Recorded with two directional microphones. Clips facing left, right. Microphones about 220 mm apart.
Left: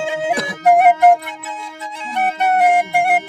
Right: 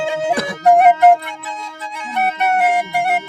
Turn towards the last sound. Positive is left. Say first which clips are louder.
# left 2 dB
turn(degrees=55)  # may be behind; listen again after turning